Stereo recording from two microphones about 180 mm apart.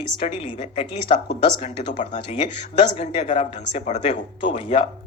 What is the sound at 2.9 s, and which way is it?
Speech, 35° left (ahead or behind).